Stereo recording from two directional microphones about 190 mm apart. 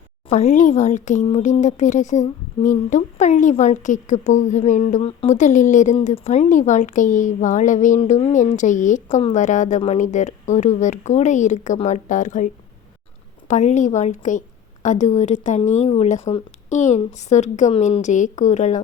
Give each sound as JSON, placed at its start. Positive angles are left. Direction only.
{"t": 0.3, "sound": "speech", "side_deg": 40}
{"t": 13.5, "sound": "speech", "side_deg": 40}